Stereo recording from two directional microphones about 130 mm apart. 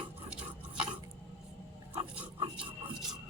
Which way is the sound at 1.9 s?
40° right (ahead or behind).